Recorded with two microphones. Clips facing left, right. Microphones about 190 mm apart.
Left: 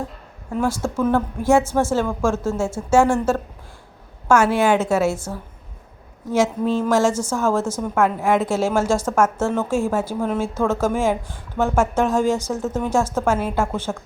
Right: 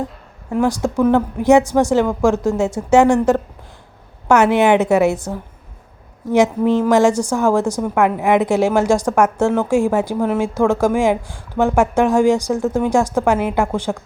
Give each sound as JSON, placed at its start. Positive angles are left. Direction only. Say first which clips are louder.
{"t": 0.5, "sound": "a woman's voice", "louder": "right 5 dB", "side_deg": -15}